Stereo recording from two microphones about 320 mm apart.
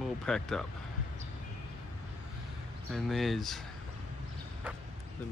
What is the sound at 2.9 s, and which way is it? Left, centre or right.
Speech, centre.